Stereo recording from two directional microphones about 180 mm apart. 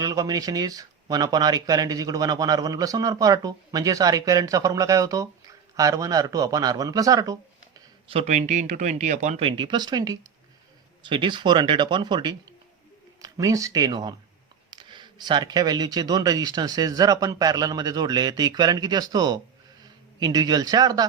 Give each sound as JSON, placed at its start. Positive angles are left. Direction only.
{"t": 0.0, "sound": "speech", "side_deg": -20}
{"t": 8.1, "sound": "a man's voice", "side_deg": -40}